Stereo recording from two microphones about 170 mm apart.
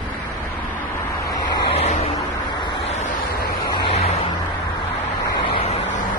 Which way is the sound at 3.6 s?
25° left (ahead or behind).